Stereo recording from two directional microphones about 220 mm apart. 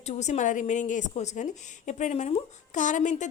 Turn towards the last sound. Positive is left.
turn(degrees=35)  # may be behind; listen again after turning